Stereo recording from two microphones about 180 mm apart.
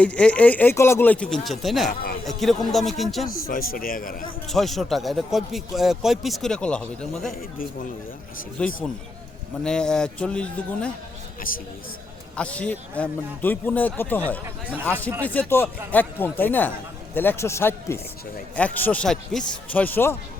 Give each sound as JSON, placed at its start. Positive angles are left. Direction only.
{"t": 0.0, "sound": "speech", "side_deg": 5}
{"t": 1.9, "sound": "speech", "side_deg": 55}
{"t": 2.2, "sound": "a man's voice", "side_deg": 0}
{"t": 3.3, "sound": "a man's voice", "side_deg": 55}
{"t": 4.4, "sound": "a man's voice", "side_deg": 0}
{"t": 8.5, "sound": "a man's voice", "side_deg": 5}
{"t": 12.4, "sound": "speech", "side_deg": 5}